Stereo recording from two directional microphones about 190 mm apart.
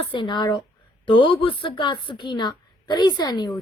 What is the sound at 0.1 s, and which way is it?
A woman's voice, 25° left (ahead or behind).